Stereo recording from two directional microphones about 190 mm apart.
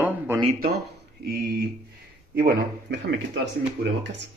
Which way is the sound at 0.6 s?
55° right (ahead or behind).